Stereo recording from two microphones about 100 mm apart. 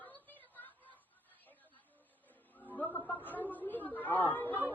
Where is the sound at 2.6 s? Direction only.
15° left (ahead or behind).